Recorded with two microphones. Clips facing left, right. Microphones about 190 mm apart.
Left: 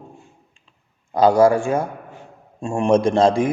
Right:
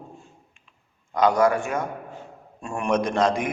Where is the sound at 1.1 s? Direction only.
30° left (ahead or behind).